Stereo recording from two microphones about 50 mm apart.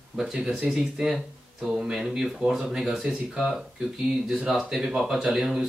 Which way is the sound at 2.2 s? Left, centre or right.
Centre.